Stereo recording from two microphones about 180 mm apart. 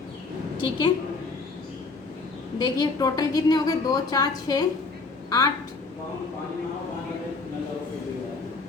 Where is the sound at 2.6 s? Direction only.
20° left (ahead or behind).